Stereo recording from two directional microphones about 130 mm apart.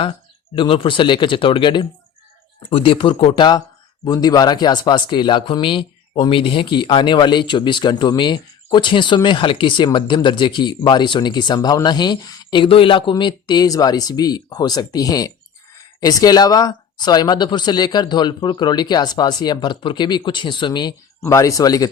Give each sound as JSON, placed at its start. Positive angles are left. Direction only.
{"t": 0.5, "sound": "speech", "side_deg": 40}
{"t": 4.0, "sound": "speech", "side_deg": 30}